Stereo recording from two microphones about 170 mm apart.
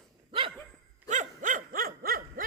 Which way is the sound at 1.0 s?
45° right (ahead or behind).